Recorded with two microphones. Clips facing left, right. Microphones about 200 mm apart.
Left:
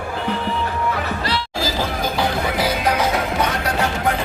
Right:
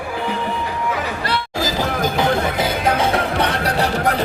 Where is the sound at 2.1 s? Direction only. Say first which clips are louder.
Right 2 dB; 25° right (ahead or behind).